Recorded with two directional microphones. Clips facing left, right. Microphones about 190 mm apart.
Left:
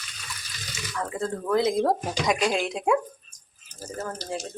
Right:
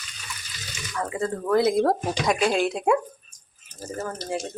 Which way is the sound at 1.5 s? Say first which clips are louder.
Right 2 dB; 5° right (ahead or behind).